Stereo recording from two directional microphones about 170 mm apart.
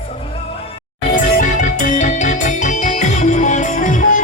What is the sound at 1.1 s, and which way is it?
Music, 50° left (ahead or behind).